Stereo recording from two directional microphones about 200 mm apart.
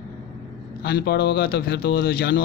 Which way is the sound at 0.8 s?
55° left (ahead or behind).